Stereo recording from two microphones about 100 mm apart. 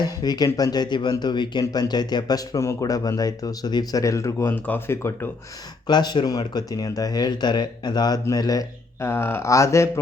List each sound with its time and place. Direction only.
0.0 s speech: 45° left (ahead or behind)
4.0 s speech: 30° left (ahead or behind)
4.5 s speech: 15° left (ahead or behind)
5.9 s speech: 45° left (ahead or behind)
9.0 s speech: 25° left (ahead or behind)